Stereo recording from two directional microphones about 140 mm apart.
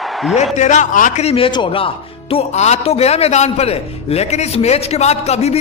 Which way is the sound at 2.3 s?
55° left (ahead or behind).